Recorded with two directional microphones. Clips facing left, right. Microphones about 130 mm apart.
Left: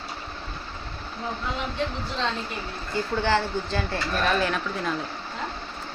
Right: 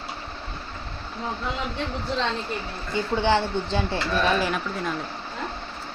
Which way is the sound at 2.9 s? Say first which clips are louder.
Right 2 dB; 20° right (ahead or behind).